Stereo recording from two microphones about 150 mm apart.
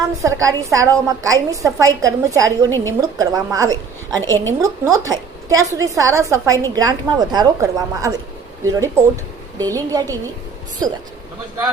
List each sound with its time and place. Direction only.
0.2 s a woman's voice: 20° right (ahead or behind)
2.6 s a woman's voice: 15° left (ahead or behind)
3.0 s a woman's voice: 20° right (ahead or behind)